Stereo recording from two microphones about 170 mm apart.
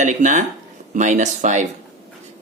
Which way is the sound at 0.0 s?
45° right (ahead or behind).